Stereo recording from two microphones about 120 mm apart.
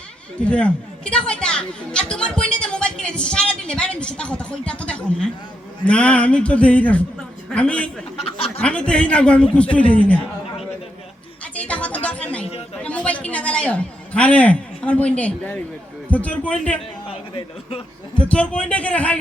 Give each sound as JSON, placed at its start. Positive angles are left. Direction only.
{"t": 0.3, "sound": "speech", "side_deg": 10}
{"t": 11.5, "sound": "music", "side_deg": 10}
{"t": 12.8, "sound": "a man's voice", "side_deg": 10}
{"t": 17.3, "sound": "speech", "side_deg": 45}
{"t": 18.2, "sound": "speech", "side_deg": 10}